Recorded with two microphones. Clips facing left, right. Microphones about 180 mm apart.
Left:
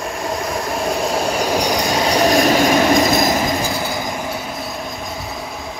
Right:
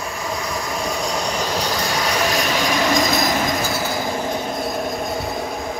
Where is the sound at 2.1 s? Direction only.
40° left (ahead or behind).